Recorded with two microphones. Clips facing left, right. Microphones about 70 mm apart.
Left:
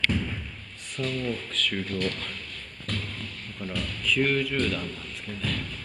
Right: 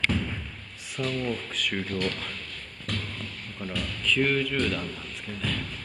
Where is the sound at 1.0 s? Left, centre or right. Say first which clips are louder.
Even; centre.